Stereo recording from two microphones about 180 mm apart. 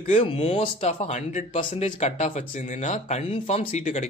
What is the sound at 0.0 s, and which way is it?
Speech, 35° left (ahead or behind).